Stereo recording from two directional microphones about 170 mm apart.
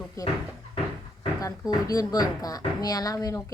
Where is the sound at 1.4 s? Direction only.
20° left (ahead or behind).